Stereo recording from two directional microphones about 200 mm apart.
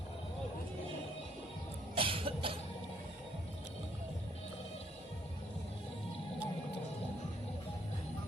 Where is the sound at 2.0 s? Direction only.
25° right (ahead or behind).